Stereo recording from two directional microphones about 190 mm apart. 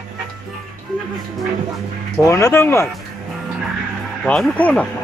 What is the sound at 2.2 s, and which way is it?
Speech, 15° left (ahead or behind).